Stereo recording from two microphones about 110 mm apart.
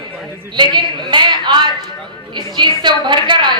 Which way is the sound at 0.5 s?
45° right (ahead or behind).